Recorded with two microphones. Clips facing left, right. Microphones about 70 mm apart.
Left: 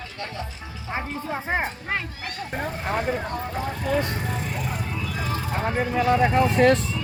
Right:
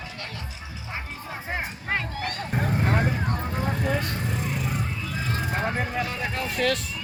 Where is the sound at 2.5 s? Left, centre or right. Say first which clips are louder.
Right 1 dB; centre.